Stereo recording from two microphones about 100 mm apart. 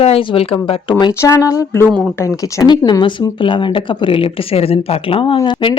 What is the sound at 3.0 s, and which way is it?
Speech, 55° left (ahead or behind).